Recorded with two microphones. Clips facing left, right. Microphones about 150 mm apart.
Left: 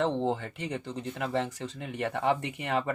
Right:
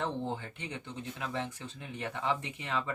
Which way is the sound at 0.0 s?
70° left (ahead or behind).